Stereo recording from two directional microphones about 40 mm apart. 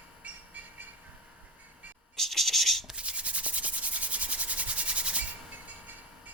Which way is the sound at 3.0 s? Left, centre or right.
Right.